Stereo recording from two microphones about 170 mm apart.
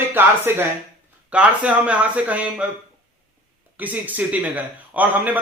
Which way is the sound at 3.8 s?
10° right (ahead or behind).